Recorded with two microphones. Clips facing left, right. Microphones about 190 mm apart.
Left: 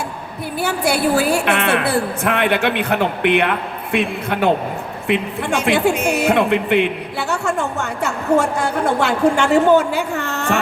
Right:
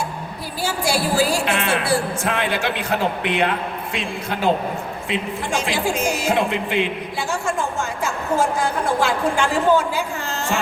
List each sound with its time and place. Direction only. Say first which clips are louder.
0.6 s a woman's voice: left 4 dB; 60° left (ahead or behind)